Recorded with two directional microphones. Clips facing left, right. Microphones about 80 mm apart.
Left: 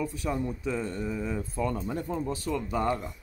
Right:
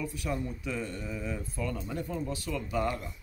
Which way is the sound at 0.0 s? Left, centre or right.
Left.